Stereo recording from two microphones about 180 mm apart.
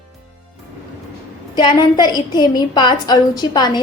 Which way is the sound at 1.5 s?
25° left (ahead or behind).